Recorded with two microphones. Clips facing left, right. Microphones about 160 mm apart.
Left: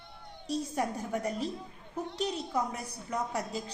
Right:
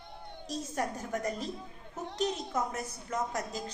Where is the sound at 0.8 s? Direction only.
10° left (ahead or behind).